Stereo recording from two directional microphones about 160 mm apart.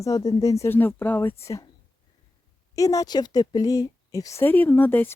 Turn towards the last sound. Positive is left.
turn(degrees=10)  # may be behind; listen again after turning